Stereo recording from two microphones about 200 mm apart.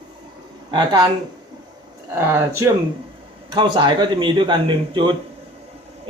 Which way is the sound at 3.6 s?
25° right (ahead or behind).